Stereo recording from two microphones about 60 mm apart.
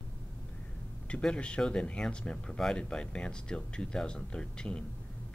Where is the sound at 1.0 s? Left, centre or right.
Centre.